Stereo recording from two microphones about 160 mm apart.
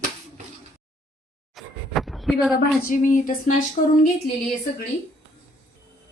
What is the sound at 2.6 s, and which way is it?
Speech, 60° left (ahead or behind).